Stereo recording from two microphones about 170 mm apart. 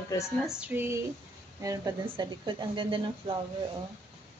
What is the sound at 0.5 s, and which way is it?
A woman's voice, 10° right (ahead or behind).